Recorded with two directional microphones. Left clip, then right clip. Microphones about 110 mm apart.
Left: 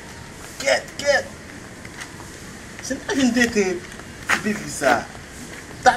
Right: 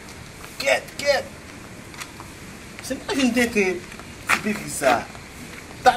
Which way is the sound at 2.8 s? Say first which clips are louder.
Left 1 dB; 35° right (ahead or behind).